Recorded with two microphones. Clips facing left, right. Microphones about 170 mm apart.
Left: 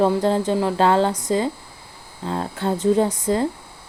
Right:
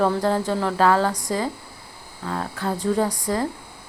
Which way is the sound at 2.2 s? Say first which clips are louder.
Left 3 dB; 25° left (ahead or behind).